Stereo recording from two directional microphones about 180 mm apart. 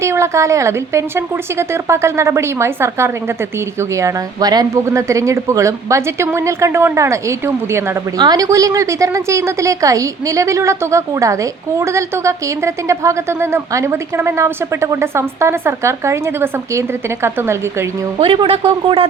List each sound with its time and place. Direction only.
0.0 s speech: 15° right (ahead or behind)
18.2 s speech: 30° right (ahead or behind)